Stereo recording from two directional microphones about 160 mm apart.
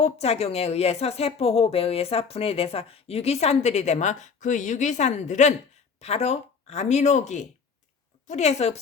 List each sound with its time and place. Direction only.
0.0 s a woman's voice: 40° left (ahead or behind)